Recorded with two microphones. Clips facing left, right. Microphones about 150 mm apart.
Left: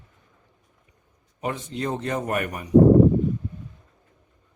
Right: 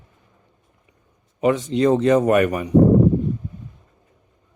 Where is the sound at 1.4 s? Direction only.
90° right.